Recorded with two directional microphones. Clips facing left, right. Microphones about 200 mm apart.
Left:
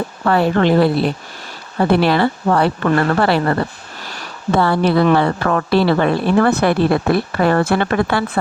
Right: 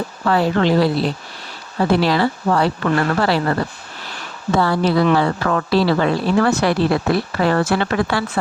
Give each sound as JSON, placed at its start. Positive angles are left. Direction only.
{"t": 0.3, "sound": "speech", "side_deg": 55}
{"t": 4.5, "sound": "speech", "side_deg": 60}